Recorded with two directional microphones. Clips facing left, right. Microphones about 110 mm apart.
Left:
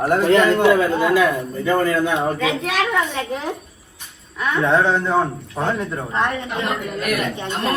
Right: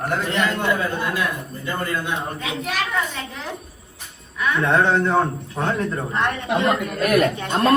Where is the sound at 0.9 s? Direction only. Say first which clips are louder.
Left 8 dB; 90° left.